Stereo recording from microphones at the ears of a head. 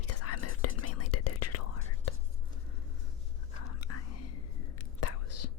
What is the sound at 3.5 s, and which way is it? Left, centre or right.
Whispering, left.